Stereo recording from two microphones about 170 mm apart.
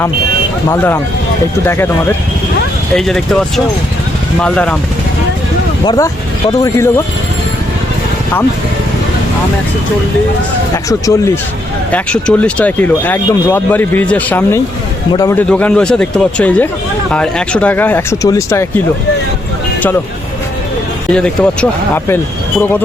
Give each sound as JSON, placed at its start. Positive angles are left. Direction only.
{"t": 1.6, "sound": "speech", "side_deg": 10}
{"t": 5.8, "sound": "speech", "side_deg": 25}
{"t": 10.8, "sound": "speech", "side_deg": 20}
{"t": 11.9, "sound": "speech", "side_deg": 10}
{"t": 15.4, "sound": "speech", "side_deg": 5}
{"t": 21.1, "sound": "speech", "side_deg": 5}